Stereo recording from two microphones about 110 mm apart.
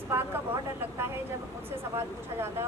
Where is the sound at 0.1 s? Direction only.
25° right (ahead or behind).